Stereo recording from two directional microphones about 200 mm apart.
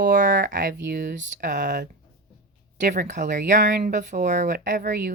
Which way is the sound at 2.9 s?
40° right (ahead or behind).